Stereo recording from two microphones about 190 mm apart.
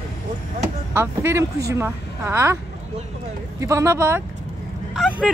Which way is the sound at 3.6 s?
15° right (ahead or behind).